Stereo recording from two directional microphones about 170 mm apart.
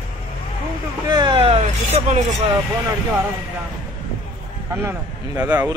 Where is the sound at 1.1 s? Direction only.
25° right (ahead or behind); by 2.4 s 45° right (ahead or behind).